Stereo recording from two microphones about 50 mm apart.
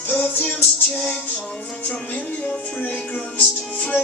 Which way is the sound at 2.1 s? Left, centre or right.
Left.